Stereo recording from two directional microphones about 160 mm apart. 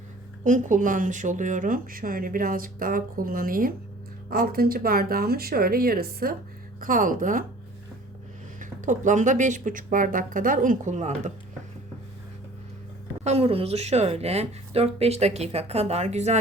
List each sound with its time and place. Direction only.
0.4 s speech: 55° right (ahead or behind); by 6.3 s 70° right (ahead or behind)
6.7 s speech: 60° right (ahead or behind)
8.5 s speech: 50° right (ahead or behind)
13.2 s speech: 40° right (ahead or behind)